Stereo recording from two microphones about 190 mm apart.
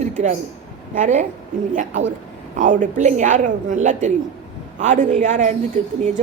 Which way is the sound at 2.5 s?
45° right (ahead or behind).